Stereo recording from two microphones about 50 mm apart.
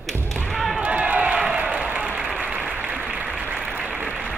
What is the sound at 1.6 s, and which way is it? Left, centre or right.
Applause, right.